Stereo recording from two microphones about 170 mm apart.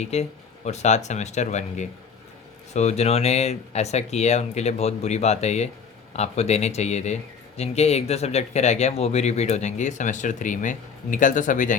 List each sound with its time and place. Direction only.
0.0 s speech: 40° left (ahead or behind)